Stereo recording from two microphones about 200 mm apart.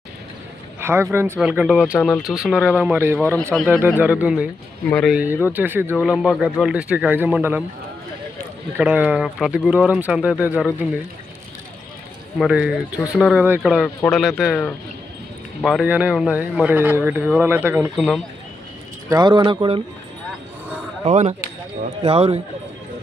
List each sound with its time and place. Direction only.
0.8 s speech: 10° right (ahead or behind)
4.9 s speech: 5° left (ahead or behind)
5.1 s speech: 10° right (ahead or behind)
8.8 s speech: 5° right (ahead or behind)
12.4 s speech: 5° right (ahead or behind)
19.0 s speech: 20° right (ahead or behind)
21.0 s speech: 35° right (ahead or behind)